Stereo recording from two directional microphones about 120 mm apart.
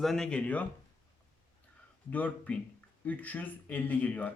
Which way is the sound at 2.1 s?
15° left (ahead or behind).